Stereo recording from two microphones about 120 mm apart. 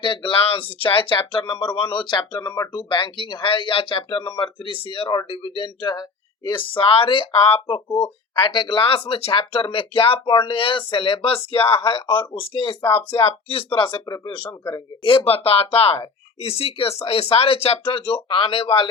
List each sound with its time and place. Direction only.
0.0 s speech: 45° left (ahead or behind)
14.0 s speech: 35° left (ahead or behind)
15.0 s speech: 50° left (ahead or behind)